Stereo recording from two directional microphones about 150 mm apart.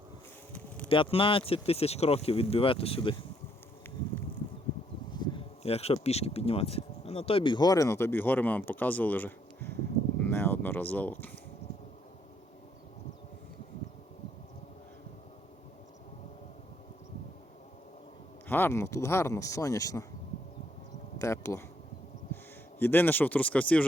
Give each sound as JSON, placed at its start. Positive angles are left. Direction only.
{"t": 0.9, "sound": "speech", "side_deg": 35}
{"t": 5.1, "sound": "speech", "side_deg": 30}
{"t": 18.4, "sound": "speech", "side_deg": 15}
{"t": 21.2, "sound": "speech", "side_deg": 20}
{"t": 22.8, "sound": "speech", "side_deg": 15}